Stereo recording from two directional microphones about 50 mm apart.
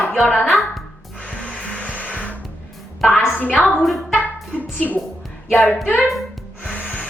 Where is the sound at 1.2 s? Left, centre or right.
Left.